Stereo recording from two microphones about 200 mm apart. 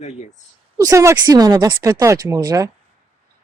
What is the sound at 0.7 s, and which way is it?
Speech, 15° right (ahead or behind).